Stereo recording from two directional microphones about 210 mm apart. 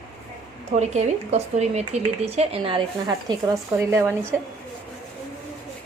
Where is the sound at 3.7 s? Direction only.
15° right (ahead or behind).